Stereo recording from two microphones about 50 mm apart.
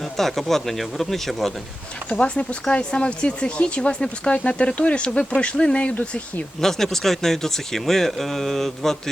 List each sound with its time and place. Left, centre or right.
0.2 s speech: centre
2.0 s speech: left
6.6 s speech: centre